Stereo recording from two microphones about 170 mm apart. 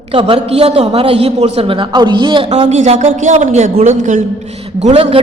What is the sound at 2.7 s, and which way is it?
A man's voice, 45° right (ahead or behind).